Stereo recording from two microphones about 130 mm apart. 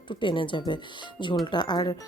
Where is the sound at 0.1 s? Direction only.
40° left (ahead or behind).